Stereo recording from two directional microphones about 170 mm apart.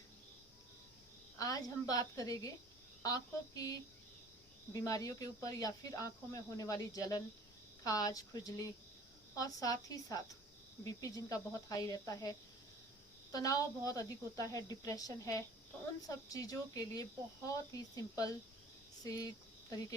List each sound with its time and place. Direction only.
1.4 s speech: 20° left (ahead or behind)
19.7 s speech: 20° left (ahead or behind)